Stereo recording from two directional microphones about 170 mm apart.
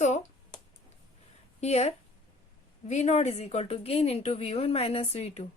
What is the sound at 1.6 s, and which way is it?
Speech, 40° left (ahead or behind).